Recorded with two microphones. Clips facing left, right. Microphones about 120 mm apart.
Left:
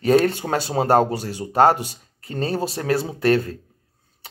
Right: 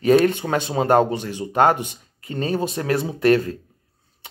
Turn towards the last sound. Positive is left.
turn(degrees=30)  # may be behind; listen again after turning